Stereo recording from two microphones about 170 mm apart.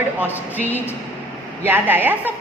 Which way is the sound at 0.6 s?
10° left (ahead or behind).